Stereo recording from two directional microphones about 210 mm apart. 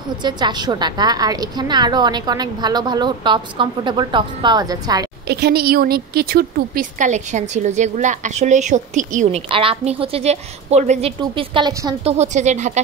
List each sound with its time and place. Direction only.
0.2 s a woman's voice: 20° right (ahead or behind)
5.3 s a woman's voice: 50° right (ahead or behind)
9.5 s a woman's voice: 25° right (ahead or behind)